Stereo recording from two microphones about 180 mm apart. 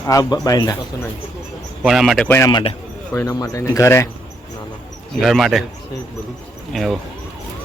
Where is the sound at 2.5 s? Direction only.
25° left (ahead or behind).